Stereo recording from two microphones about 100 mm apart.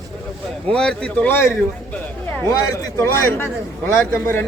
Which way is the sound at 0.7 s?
10° left (ahead or behind).